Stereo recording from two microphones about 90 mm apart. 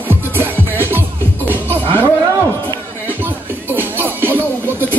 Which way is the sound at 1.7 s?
20° left (ahead or behind).